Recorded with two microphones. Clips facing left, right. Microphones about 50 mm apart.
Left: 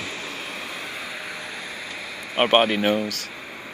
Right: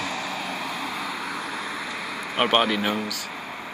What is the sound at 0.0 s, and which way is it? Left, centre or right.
Vehicle, left.